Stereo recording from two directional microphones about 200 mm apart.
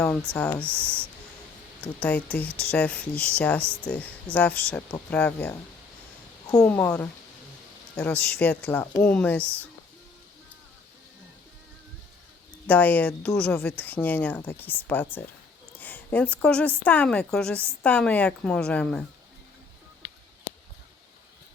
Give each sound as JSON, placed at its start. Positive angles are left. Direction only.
{"t": 0.3, "sound": "a woman's voice", "side_deg": 5}
{"t": 1.8, "sound": "a woman's voice", "side_deg": 5}
{"t": 12.6, "sound": "a woman's voice", "side_deg": 5}